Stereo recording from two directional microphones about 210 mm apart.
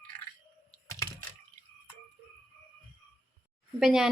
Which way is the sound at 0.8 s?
15° left (ahead or behind).